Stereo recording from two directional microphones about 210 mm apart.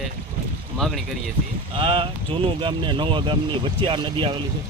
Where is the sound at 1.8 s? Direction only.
25° right (ahead or behind).